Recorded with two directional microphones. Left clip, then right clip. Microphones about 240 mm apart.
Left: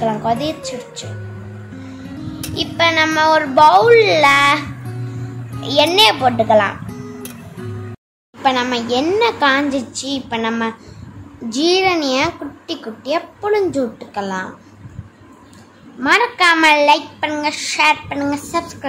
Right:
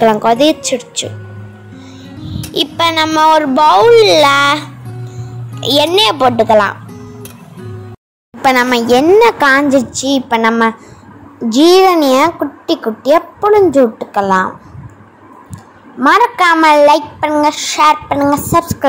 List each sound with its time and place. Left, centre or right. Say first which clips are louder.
0.0 s a woman's voice: right 9 dB; right
2.0 s music: right 1 dB; centre
2.5 s a woman's voice: right 3 dB; right
6.9 s music: even; centre
8.4 s a woman's voice: right 6 dB; right
16.1 s a woman's voice: right 4 dB; right